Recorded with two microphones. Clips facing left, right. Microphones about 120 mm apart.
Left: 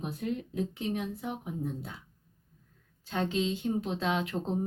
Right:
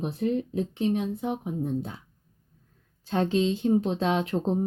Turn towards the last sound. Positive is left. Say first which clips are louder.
# right 5 dB
turn(degrees=-25)  # may be behind; listen again after turning